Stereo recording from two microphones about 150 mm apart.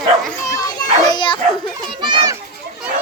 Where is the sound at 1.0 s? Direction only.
30° left (ahead or behind).